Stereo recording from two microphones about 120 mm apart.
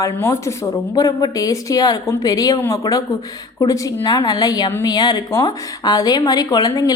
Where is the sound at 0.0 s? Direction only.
25° left (ahead or behind).